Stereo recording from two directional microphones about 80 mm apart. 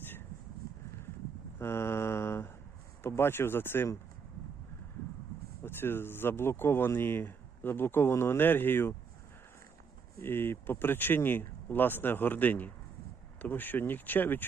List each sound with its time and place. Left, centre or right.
1.5 s mantra: left
3.0 s speech: left
5.6 s speech: left
10.2 s speech: left